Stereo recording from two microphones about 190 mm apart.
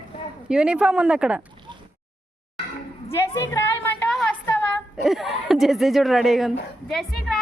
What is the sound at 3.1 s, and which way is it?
Speech, 15° left (ahead or behind).